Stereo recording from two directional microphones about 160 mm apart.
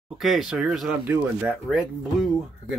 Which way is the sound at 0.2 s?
Centre (ahead or behind).